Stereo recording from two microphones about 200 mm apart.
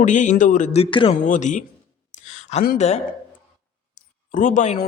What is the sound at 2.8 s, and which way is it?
Speech, 35° left (ahead or behind).